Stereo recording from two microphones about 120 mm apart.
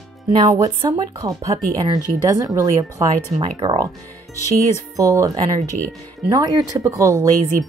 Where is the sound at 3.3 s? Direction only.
60° right (ahead or behind).